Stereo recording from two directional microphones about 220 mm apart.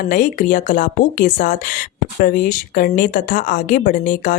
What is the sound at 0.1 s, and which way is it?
Speech, 35° left (ahead or behind).